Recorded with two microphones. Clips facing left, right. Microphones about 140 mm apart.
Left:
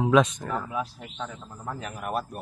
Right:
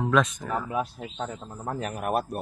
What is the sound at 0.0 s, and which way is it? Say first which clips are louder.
Speech: left 3 dB; centre (ahead or behind).